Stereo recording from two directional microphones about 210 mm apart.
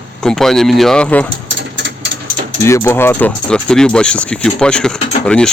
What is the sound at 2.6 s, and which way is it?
Speech, 15° left (ahead or behind).